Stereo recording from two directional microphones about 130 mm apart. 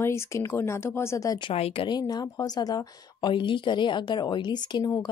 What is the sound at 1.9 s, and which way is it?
Speech, 30° left (ahead or behind).